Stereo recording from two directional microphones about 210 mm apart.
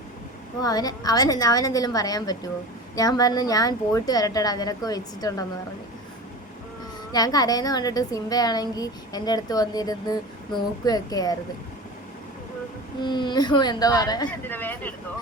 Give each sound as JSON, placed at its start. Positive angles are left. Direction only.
{"t": 0.6, "sound": "a woman's voice", "side_deg": 20}
{"t": 7.1, "sound": "a woman's voice", "side_deg": 20}
{"t": 13.0, "sound": "a woman's voice", "side_deg": 20}